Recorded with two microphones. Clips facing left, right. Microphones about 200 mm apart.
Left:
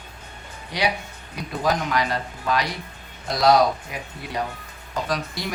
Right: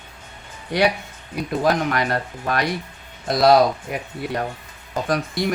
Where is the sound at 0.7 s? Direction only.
55° right (ahead or behind).